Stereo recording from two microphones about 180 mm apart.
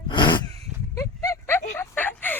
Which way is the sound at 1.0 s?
15° left (ahead or behind).